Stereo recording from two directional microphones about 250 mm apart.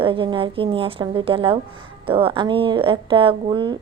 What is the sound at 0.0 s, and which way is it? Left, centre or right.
A woman's voice, right.